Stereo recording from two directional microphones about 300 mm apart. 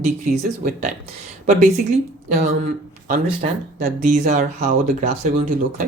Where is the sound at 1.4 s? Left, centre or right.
Right.